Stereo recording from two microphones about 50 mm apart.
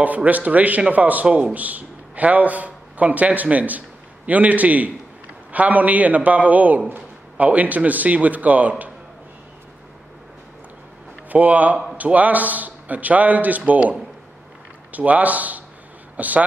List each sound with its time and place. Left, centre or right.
0.0 s a man's voice: right
11.2 s a man's voice: right